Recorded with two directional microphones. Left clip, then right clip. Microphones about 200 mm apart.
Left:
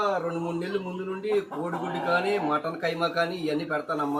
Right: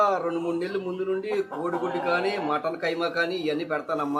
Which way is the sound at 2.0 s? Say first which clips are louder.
Left 2 dB; 25° right (ahead or behind).